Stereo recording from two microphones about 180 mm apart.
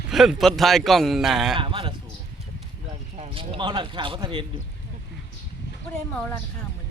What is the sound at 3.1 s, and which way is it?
Speech, 30° right (ahead or behind).